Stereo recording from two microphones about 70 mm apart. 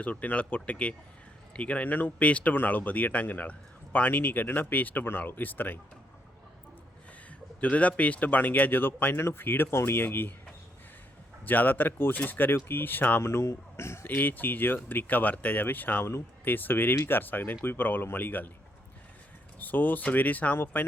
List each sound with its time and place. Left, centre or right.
0.0 s speech: left
7.6 s speech: left
11.4 s speech: left
19.5 s speech: left